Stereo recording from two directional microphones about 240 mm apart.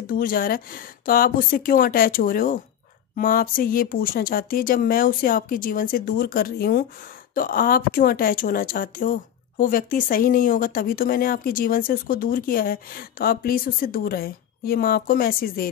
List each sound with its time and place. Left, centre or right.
0.0 s speech: left